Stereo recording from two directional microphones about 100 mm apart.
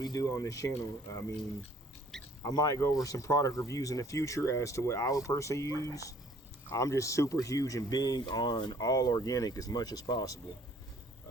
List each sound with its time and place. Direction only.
0.0 s speech: 35° left (ahead or behind)
2.4 s speech: 40° left (ahead or behind)